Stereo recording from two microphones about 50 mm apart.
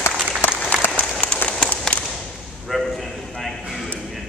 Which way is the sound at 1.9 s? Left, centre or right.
Centre.